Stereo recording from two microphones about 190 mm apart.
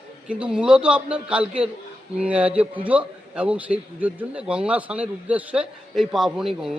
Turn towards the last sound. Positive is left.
turn(degrees=0)  # may be behind; listen again after turning